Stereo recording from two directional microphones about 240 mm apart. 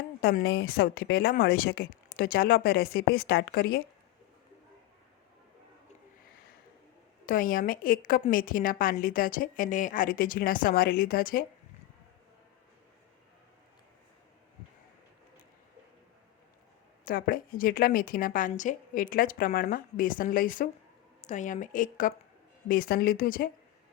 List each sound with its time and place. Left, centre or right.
0.2 s a woman's voice: left
7.3 s a woman's voice: left
17.1 s a woman's voice: left